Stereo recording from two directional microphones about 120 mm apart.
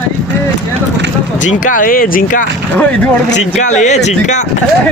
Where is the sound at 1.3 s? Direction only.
90° left.